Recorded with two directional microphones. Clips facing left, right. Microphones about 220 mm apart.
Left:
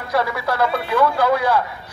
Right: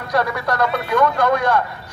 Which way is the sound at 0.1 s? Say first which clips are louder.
Right 1 dB; centre (ahead or behind).